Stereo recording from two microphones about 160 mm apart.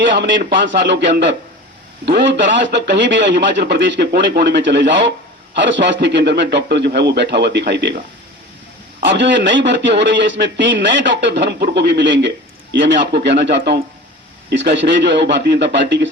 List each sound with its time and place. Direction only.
0.0 s a man's voice: 90° right